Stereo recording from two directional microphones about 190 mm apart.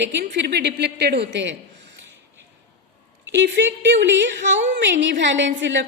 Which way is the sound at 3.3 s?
70° right (ahead or behind).